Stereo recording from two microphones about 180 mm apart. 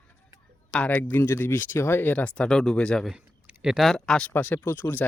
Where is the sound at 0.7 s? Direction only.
10° left (ahead or behind).